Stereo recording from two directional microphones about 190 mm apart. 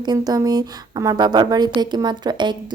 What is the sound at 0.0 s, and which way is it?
A woman's voice, 20° right (ahead or behind).